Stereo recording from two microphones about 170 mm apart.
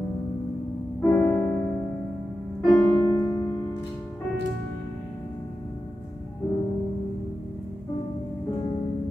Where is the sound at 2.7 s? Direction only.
10° left (ahead or behind).